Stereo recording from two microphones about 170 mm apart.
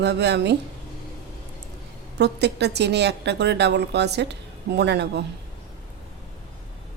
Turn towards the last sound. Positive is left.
turn(degrees=-80)